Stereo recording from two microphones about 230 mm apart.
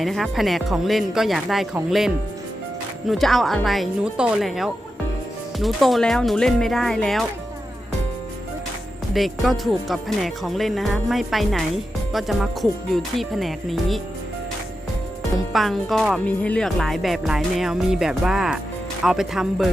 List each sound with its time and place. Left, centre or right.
0.0 s speech: centre
9.1 s speech: centre
15.5 s speech: centre